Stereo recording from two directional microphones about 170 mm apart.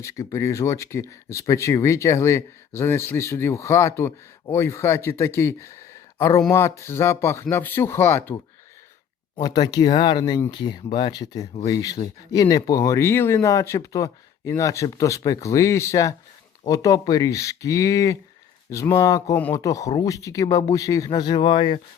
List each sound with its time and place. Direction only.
0.0 s speech: 20° left (ahead or behind)
9.4 s speech: 20° left (ahead or behind)